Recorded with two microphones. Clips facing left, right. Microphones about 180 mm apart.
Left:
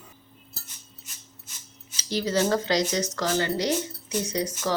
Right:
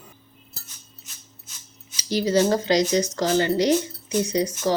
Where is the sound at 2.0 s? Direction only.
15° right (ahead or behind).